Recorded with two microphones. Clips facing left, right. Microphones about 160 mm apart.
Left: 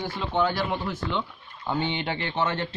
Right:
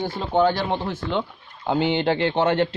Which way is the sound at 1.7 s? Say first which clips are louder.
Right 7 dB; 90° right.